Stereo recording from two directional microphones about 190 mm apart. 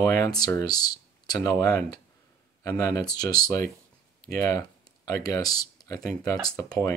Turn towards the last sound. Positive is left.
turn(degrees=15)  # may be behind; listen again after turning